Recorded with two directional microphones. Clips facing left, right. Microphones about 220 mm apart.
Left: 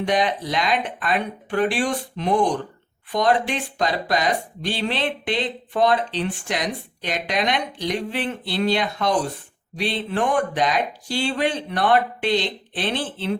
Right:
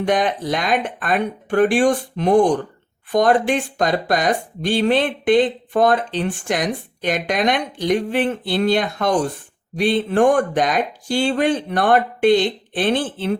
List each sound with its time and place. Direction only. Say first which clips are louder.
0.0 s speech: right 3 dB; 50° right (ahead or behind)